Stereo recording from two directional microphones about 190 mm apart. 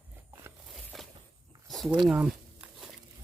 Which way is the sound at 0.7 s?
Centre (ahead or behind).